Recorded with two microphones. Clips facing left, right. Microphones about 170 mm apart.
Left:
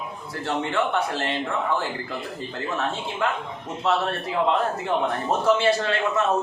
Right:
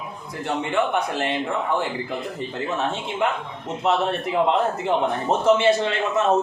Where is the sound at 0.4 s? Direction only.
15° right (ahead or behind).